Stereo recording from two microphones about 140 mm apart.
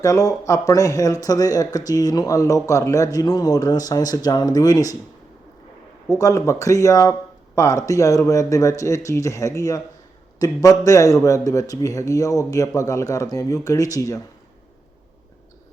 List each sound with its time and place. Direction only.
0.0 s a man's voice: 25° left (ahead or behind)
6.1 s a man's voice: 25° left (ahead or behind)